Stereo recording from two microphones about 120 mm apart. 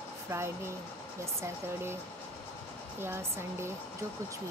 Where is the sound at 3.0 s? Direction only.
20° right (ahead or behind).